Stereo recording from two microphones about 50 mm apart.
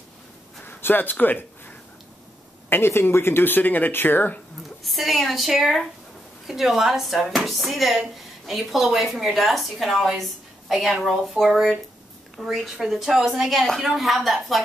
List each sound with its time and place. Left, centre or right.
0.7 s a sound: left
2.7 s speech: left
4.6 s a woman's voice: centre